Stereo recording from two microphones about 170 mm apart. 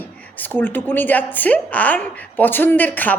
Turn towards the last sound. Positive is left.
turn(degrees=10)  # may be behind; listen again after turning